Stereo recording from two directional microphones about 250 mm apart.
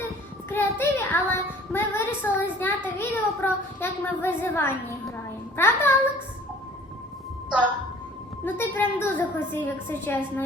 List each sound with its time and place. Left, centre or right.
0.5 s a sound: centre
5.5 s a woman's voice: centre
8.4 s a woman's voice: centre